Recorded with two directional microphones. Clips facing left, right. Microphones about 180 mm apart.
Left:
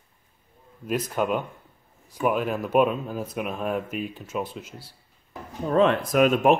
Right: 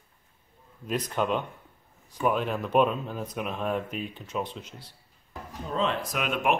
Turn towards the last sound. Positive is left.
turn(degrees=40)  # may be behind; listen again after turning